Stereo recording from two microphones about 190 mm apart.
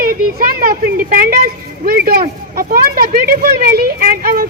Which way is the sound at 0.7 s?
45° right (ahead or behind).